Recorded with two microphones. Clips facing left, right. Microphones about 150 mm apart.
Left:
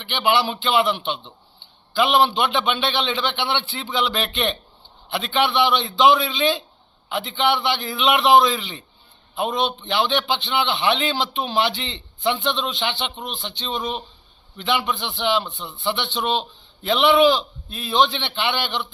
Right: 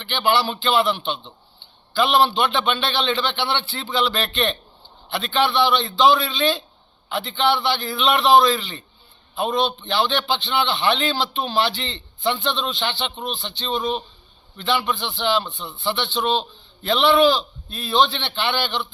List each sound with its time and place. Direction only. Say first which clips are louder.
0.0 s a man's voice: even; 15° left (ahead or behind)
9.3 s a man's voice: right 1 dB; centre (ahead or behind)
9.6 s a man's voice: right 1 dB; 20° left (ahead or behind)
17.7 s a man's voice: even; centre (ahead or behind)
17.9 s a man's voice: even; 20° left (ahead or behind)